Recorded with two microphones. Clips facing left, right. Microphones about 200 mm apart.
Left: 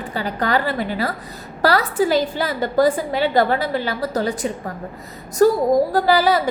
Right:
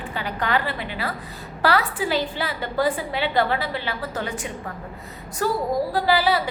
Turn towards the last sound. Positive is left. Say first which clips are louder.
# left 4 dB
turn(degrees=45)  # may be behind; listen again after turning